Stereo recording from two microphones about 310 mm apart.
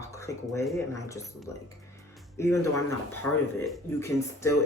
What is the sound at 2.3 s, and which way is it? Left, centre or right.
Speech, centre.